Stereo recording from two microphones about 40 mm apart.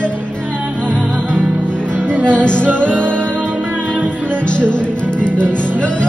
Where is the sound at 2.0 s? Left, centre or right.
Right.